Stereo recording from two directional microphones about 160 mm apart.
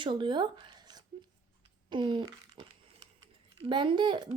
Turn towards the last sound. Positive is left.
turn(degrees=-30)  # may be behind; listen again after turning